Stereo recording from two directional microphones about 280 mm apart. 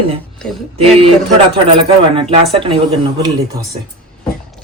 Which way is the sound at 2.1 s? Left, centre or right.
Centre.